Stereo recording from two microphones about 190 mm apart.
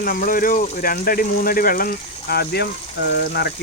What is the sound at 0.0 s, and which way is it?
Speech, 50° left (ahead or behind).